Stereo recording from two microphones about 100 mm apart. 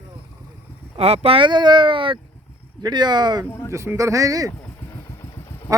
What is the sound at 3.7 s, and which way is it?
Speech, 30° right (ahead or behind).